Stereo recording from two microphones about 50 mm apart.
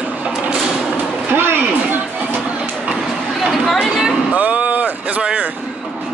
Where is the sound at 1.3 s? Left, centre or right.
Right.